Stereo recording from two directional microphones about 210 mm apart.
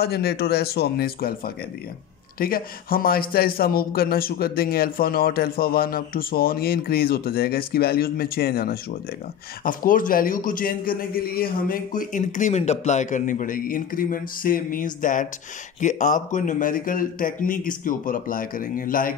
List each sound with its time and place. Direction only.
0.0 s a man's voice: 50° left (ahead or behind)